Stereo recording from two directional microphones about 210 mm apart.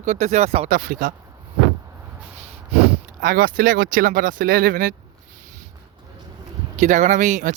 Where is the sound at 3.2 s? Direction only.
40° right (ahead or behind).